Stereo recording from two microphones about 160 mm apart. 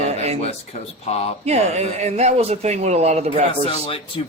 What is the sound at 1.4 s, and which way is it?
Speech, 40° right (ahead or behind).